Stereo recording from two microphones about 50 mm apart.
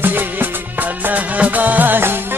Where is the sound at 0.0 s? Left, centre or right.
Right.